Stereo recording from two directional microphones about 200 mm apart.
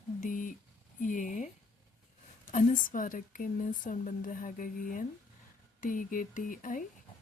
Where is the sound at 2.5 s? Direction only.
40° left (ahead or behind).